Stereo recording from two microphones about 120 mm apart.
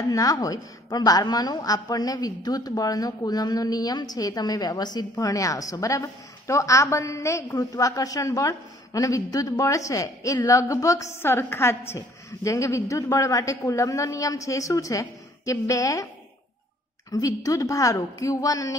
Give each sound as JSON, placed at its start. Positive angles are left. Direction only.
{"t": 0.1, "sound": "a woman's voice", "side_deg": 30}
{"t": 17.1, "sound": "a woman's voice", "side_deg": 30}